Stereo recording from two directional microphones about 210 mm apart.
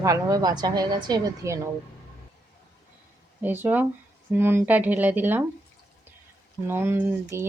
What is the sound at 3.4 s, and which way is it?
Speech, 10° right (ahead or behind).